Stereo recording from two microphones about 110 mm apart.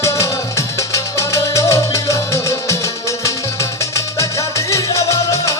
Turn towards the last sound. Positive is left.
turn(degrees=25)  # may be behind; listen again after turning